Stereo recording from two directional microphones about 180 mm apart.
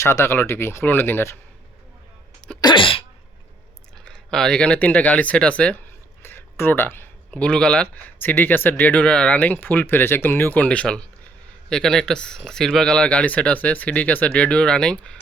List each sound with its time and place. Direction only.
0.0 s speech: 15° left (ahead or behind)
2.6 s sneeze: 25° left (ahead or behind)
4.0 s speech: 5° left (ahead or behind)